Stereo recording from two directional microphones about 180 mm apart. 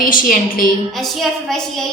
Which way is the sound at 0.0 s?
50° left (ahead or behind).